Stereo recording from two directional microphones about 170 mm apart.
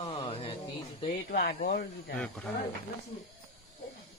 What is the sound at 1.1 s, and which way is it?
Speech, 60° left (ahead or behind).